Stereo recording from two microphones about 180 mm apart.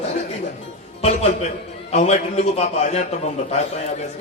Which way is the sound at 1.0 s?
40° left (ahead or behind).